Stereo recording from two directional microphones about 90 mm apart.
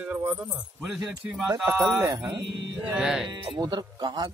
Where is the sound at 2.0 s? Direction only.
25° right (ahead or behind).